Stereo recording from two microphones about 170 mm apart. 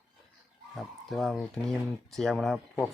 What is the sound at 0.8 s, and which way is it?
Speech, centre (ahead or behind).